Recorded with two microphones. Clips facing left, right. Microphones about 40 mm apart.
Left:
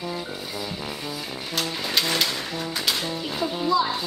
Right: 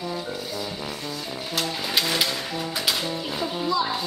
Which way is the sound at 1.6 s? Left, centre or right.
Centre.